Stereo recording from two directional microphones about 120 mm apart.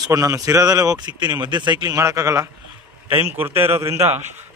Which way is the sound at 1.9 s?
25° right (ahead or behind).